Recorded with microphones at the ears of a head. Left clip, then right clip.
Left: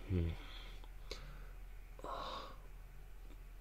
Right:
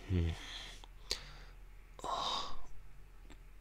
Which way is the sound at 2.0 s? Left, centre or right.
Right.